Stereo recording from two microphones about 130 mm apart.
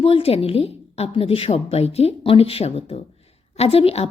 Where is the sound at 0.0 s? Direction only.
50° left (ahead or behind).